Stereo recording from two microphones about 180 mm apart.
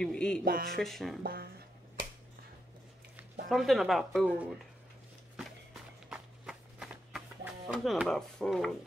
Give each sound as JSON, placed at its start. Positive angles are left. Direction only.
{"t": 0.0, "sound": "speech", "side_deg": 5}
{"t": 0.5, "sound": "speech", "side_deg": -55}
{"t": 0.7, "sound": "speech", "side_deg": 0}
{"t": 1.2, "sound": "speech", "side_deg": -55}
{"t": 3.4, "sound": "speech", "side_deg": 0}
{"t": 6.0, "sound": "walk", "side_deg": -5}
{"t": 7.7, "sound": "speech", "side_deg": 0}